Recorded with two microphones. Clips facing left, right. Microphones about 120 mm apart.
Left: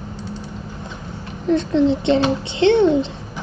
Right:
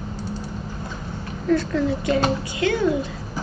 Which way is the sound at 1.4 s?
20° left (ahead or behind).